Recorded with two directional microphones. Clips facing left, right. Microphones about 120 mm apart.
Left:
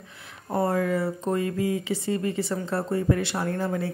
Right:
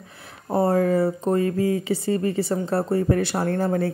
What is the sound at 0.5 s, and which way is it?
Speech, 30° right (ahead or behind).